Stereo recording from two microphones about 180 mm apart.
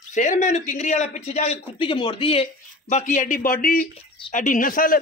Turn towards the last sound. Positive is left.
turn(degrees=50)  # may be behind; listen again after turning